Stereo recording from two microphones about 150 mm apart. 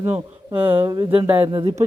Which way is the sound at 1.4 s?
35° right (ahead or behind).